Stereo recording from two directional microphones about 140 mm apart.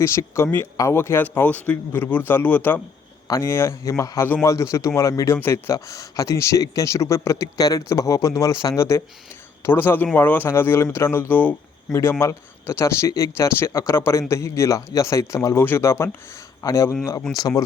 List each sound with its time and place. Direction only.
0.0 s a man's voice: 20° left (ahead or behind)